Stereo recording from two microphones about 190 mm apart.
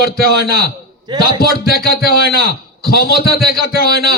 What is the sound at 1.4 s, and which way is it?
A man's voice, 55° left (ahead or behind).